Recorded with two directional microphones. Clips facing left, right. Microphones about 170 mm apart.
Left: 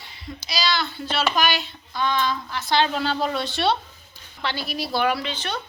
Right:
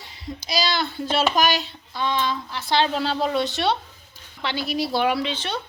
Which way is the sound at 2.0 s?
25° right (ahead or behind).